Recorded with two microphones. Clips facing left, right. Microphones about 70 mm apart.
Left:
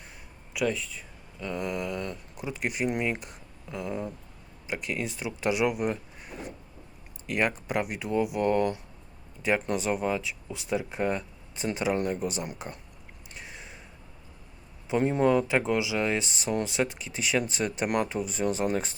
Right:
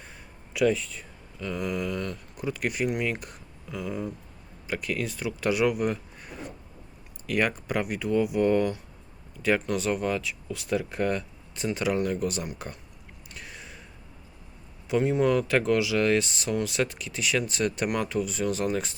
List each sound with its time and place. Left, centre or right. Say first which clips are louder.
0.5 s speech: right 5 dB; centre
1.4 s speech: right 1 dB; centre
7.3 s speech: right 1 dB; centre
9.6 s speech: right 1 dB; left
13.3 s a sound: right 1 dB; left
14.8 s speech: even; left